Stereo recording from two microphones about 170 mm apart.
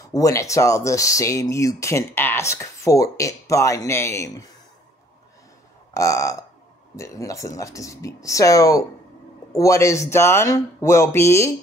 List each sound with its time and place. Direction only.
0.1 s speech: 20° left (ahead or behind)
5.9 s speech: 20° left (ahead or behind)